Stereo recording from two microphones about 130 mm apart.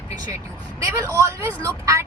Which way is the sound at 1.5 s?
10° left (ahead or behind).